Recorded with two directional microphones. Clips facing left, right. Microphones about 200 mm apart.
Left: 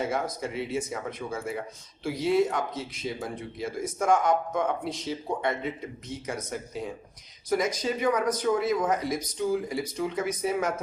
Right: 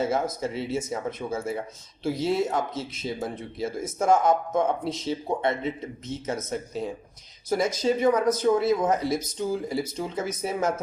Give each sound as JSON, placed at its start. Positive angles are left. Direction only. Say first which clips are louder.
{"t": 0.1, "sound": "speech", "louder": "right 3 dB", "side_deg": -25}